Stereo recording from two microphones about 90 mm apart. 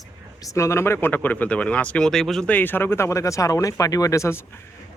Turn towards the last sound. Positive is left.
turn(degrees=30)  # may be behind; listen again after turning